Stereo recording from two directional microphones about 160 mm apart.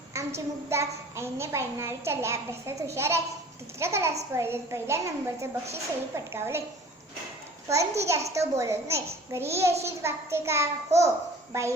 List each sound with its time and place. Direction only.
0.3 s a child's voice: 15° right (ahead or behind)
7.7 s a child's voice: 20° right (ahead or behind)